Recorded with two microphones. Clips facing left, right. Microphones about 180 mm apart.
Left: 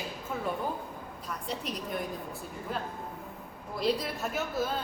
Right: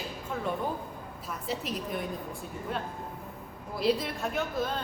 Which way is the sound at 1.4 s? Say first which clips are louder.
Right 3 dB; 5° right (ahead or behind).